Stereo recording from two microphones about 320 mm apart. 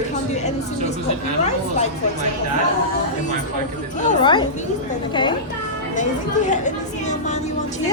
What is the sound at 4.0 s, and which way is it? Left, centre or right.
A woman's voice, centre.